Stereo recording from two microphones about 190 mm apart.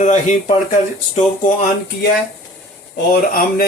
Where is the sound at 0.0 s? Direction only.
40° left (ahead or behind).